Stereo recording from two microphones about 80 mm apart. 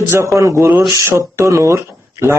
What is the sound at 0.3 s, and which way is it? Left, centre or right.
Speech, right.